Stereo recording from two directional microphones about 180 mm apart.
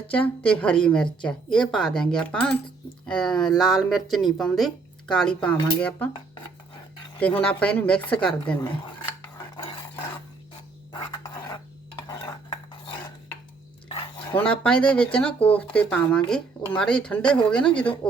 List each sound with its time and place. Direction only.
0.1 s a woman's voice: 5° left (ahead or behind)
7.4 s a woman's voice: 10° left (ahead or behind)
8.6 s cutlery: 25° left (ahead or behind)
10.9 s a sound: 20° left (ahead or behind)
13.8 s a sound: 30° left (ahead or behind)
14.3 s a woman's voice: 5° left (ahead or behind)